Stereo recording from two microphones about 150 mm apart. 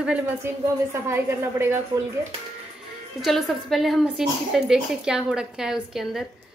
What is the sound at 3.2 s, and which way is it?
A woman's voice, centre (ahead or behind).